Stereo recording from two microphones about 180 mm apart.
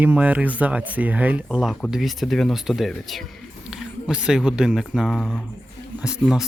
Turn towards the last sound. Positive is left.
turn(degrees=-5)  # may be behind; listen again after turning